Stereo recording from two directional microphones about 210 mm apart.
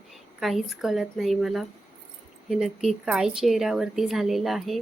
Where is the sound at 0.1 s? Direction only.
Centre (ahead or behind).